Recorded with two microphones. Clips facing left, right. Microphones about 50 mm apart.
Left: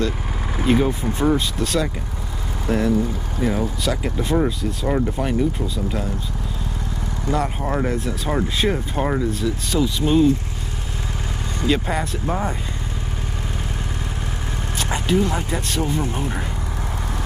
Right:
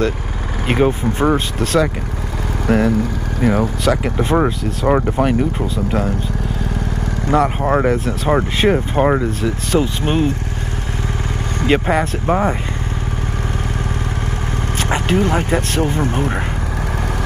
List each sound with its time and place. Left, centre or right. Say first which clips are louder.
0.7 s speech: right 3 dB; right
2.6 s speech: right 4 dB; right
5.4 s speech: right 3 dB; right
7.2 s speech: right 7 dB; right
11.6 s speech: right 6 dB; right
14.8 s speech: right 3 dB; right